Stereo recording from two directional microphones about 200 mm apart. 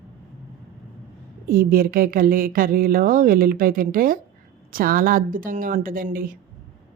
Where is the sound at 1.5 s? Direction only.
45° right (ahead or behind).